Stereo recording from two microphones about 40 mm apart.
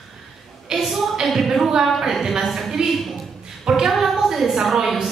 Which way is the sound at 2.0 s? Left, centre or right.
Centre.